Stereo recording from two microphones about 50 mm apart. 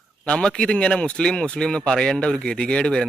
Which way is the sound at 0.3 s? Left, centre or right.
Centre.